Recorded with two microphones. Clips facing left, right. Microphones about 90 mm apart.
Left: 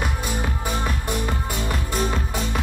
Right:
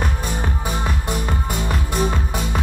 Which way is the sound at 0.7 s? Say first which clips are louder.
Right 1 dB; centre (ahead or behind).